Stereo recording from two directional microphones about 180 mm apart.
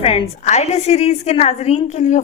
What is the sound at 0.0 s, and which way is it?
A woman's voice, 30° left (ahead or behind).